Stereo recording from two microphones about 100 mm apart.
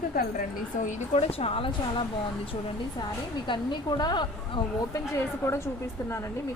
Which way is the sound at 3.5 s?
50° left (ahead or behind).